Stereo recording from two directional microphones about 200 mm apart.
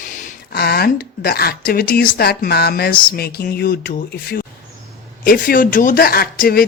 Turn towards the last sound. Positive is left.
turn(degrees=45)  # may be behind; listen again after turning